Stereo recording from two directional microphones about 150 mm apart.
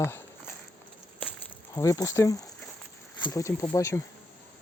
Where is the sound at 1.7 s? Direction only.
20° left (ahead or behind).